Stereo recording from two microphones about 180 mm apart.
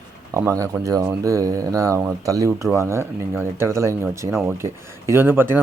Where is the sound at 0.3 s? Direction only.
15° right (ahead or behind).